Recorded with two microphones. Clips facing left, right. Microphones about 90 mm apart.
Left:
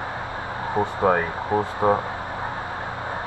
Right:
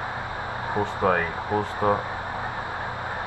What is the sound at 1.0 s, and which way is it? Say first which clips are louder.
Speech: left 2 dB; 20° left (ahead or behind).